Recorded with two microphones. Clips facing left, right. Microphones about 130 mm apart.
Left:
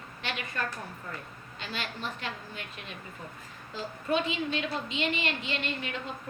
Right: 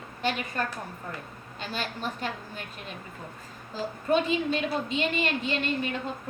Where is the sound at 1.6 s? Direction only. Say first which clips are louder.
Right 3 dB; 40° right (ahead or behind).